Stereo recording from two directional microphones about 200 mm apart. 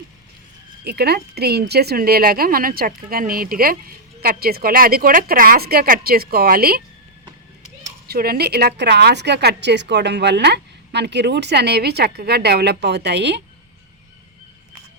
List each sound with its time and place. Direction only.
0.9 s a woman's voice: 50° right (ahead or behind)
8.0 s a woman's voice: 50° right (ahead or behind)